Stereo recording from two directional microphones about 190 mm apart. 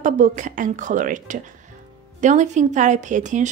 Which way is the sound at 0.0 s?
40° right (ahead or behind).